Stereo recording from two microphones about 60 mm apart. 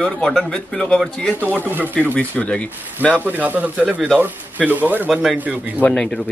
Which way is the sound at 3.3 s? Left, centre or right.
Right.